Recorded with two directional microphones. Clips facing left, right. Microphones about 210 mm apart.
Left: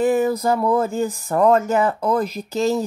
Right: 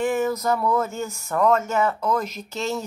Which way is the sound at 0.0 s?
35° left (ahead or behind).